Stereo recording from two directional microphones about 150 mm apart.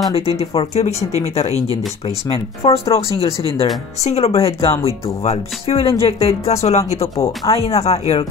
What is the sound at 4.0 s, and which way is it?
Speech, 45° left (ahead or behind).